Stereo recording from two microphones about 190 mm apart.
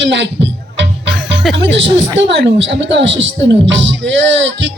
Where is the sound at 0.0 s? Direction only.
70° right (ahead or behind).